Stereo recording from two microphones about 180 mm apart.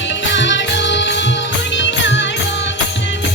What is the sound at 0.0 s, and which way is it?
Music, 90° left.